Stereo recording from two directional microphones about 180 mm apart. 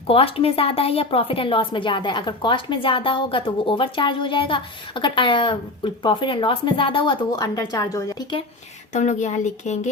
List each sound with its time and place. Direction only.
0.1 s a woman's voice: 30° left (ahead or behind)
8.9 s speech: 40° left (ahead or behind)